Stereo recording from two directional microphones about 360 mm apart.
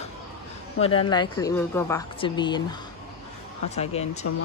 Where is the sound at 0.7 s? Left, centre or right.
Centre.